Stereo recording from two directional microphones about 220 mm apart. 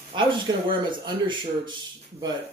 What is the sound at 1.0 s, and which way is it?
Speech, 20° right (ahead or behind).